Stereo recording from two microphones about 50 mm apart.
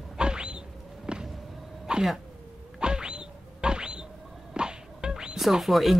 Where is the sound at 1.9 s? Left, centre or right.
Centre.